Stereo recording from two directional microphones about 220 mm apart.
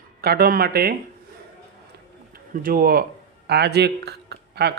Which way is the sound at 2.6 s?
40° right (ahead or behind).